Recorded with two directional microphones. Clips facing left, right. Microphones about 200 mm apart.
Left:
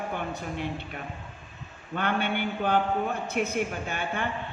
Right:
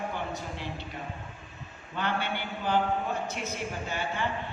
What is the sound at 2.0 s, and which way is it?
A woman's voice, 55° left (ahead or behind).